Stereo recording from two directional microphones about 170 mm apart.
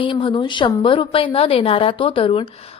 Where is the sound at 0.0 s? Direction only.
30° left (ahead or behind).